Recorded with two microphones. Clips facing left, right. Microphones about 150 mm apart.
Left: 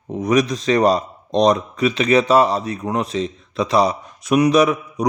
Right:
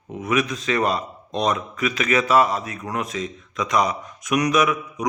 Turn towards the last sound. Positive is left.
turn(degrees=35)  # may be behind; listen again after turning